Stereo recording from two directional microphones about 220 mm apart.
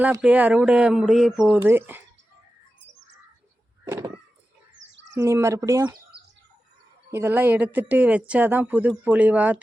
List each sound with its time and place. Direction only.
0.0 s speech: 5° right (ahead or behind)
3.8 s a sound: 15° right (ahead or behind)
4.9 s bird: 55° right (ahead or behind)
5.1 s speech: 15° right (ahead or behind)
7.1 s speech: 10° right (ahead or behind)